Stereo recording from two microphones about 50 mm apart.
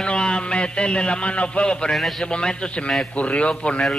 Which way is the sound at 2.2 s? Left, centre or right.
Centre.